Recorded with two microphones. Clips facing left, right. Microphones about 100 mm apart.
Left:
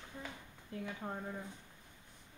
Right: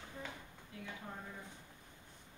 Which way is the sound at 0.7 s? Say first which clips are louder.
Left 8 dB; 40° left (ahead or behind).